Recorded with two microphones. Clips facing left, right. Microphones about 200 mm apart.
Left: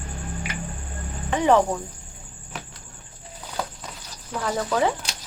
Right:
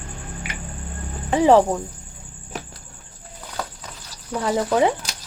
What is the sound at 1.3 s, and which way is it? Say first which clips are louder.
Speech: right 4 dB; 35° right (ahead or behind).